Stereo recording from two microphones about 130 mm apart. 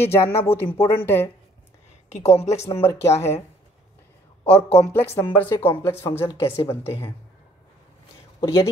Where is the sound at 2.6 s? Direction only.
20° left (ahead or behind).